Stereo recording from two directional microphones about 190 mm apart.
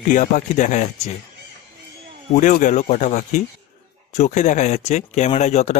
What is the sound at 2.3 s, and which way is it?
Speech, 45° left (ahead or behind).